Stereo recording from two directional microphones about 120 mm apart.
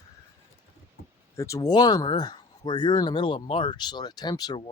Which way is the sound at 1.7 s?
35° left (ahead or behind).